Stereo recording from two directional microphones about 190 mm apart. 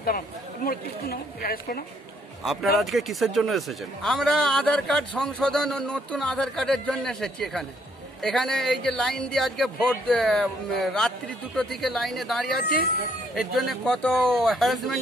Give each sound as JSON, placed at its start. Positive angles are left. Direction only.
{"t": 0.7, "sound": "speech", "side_deg": 50}
{"t": 2.4, "sound": "a man's voice", "side_deg": 0}